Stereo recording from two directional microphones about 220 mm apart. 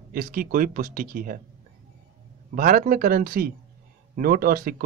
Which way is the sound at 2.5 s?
40° right (ahead or behind).